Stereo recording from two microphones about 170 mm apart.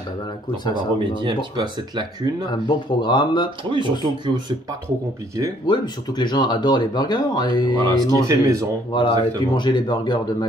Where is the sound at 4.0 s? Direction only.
25° right (ahead or behind).